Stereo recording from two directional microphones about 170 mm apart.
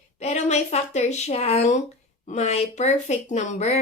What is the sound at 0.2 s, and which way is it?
A woman's voice, 40° left (ahead or behind).